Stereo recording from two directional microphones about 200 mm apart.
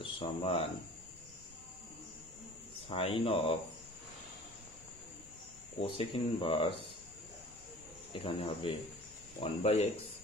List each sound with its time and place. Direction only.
0.0 s speech: 25° left (ahead or behind)
2.9 s speech: 25° left (ahead or behind)
5.9 s speech: 25° left (ahead or behind)
8.1 s speech: 25° left (ahead or behind)